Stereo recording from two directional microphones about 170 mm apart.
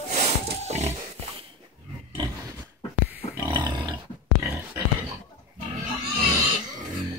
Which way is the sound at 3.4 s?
30° right (ahead or behind).